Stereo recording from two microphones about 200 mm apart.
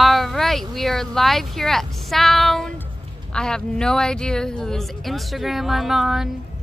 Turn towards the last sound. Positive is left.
turn(degrees=0)  # may be behind; listen again after turning